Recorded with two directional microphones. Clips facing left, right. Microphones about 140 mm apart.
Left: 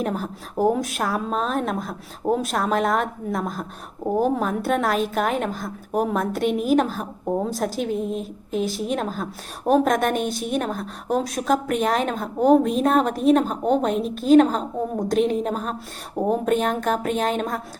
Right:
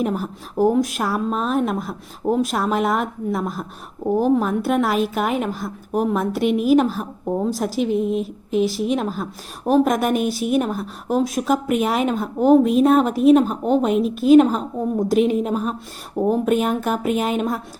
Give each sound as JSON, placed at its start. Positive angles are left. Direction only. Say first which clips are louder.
{"t": 0.0, "sound": "speech", "louder": "right 3 dB", "side_deg": -5}